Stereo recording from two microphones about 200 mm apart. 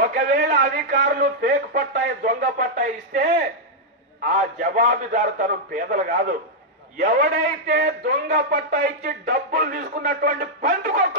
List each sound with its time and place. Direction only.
0.0 s a man's voice: 45° right (ahead or behind)
4.3 s a man's voice: 45° right (ahead or behind)